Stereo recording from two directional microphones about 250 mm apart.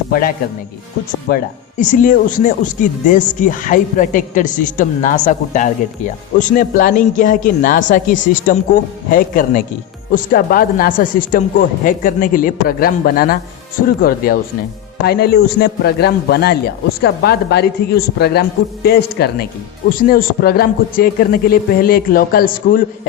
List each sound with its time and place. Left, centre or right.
0.1 s a man's voice: left